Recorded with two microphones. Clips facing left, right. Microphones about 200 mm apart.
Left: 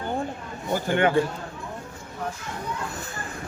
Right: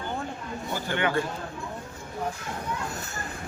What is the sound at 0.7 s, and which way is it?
Speech, 45° left (ahead or behind).